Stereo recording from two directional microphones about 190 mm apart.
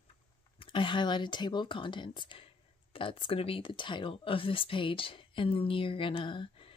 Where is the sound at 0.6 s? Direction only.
25° left (ahead or behind).